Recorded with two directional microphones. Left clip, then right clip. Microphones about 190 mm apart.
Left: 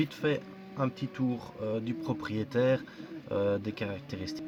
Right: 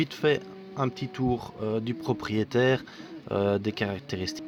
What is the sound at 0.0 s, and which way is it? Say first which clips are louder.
Speech: right 5 dB; 40° right (ahead or behind).